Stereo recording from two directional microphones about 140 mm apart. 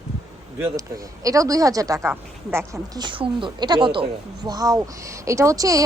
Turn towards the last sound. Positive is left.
turn(degrees=-25)  # may be behind; listen again after turning